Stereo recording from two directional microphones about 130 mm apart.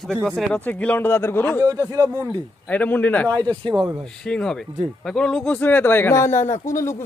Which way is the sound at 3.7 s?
5° right (ahead or behind).